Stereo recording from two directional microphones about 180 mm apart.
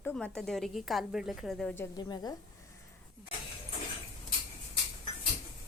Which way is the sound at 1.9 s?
20° left (ahead or behind).